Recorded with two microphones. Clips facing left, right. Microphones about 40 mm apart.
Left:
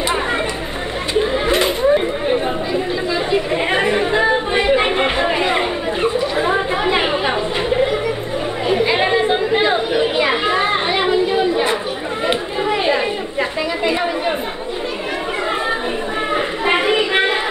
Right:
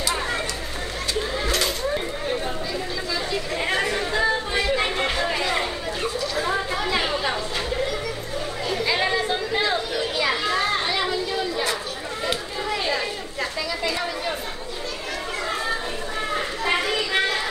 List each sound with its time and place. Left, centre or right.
1.1 s chatter: left
12.3 s children playing: left
16.3 s a sound: left